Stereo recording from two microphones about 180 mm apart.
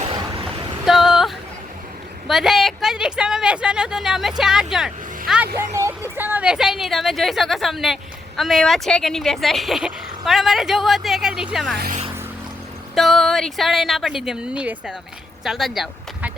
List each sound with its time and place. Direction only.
0.1 s vehicle: 30° right (ahead or behind)
0.9 s female singing: 5° right (ahead or behind)
2.2 s speech: centre (ahead or behind)
5.5 s a woman's voice: 15° right (ahead or behind)
12.9 s speech: centre (ahead or behind)